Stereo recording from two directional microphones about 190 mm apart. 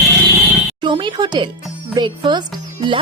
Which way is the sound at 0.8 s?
25° right (ahead or behind).